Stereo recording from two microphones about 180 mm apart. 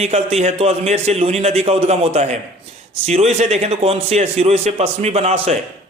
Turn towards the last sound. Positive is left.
turn(degrees=-35)  # may be behind; listen again after turning